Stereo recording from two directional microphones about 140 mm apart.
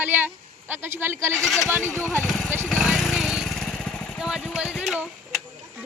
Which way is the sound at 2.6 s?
Centre (ahead or behind).